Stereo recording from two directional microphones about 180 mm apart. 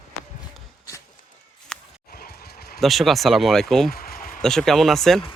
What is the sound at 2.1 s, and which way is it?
Vehicle, 60° left (ahead or behind).